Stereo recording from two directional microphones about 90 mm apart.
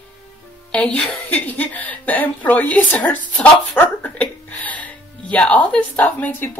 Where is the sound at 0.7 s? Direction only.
15° left (ahead or behind).